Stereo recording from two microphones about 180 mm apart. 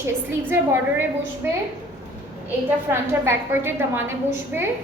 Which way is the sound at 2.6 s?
15° right (ahead or behind).